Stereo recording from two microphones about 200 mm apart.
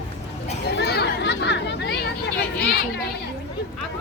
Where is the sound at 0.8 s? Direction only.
55° left (ahead or behind).